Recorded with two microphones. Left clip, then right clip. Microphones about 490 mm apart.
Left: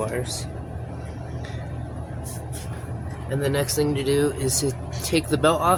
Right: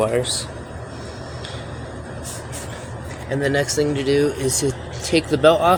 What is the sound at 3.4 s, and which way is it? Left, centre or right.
Speech, left.